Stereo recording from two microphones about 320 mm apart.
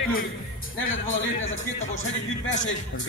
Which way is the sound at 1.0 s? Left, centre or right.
Left.